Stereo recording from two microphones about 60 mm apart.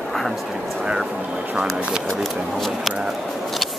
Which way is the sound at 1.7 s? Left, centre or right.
Centre.